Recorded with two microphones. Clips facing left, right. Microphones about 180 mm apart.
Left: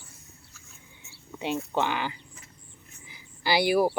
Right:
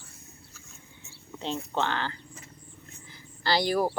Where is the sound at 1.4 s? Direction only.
10° left (ahead or behind).